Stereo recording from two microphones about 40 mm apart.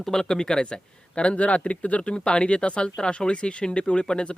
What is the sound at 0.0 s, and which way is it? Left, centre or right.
Speech, centre.